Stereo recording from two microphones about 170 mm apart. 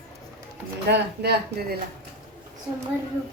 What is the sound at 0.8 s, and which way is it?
Speech, 75° right (ahead or behind).